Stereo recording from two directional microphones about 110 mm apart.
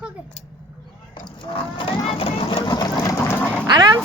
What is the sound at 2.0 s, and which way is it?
Music, 60° left (ahead or behind).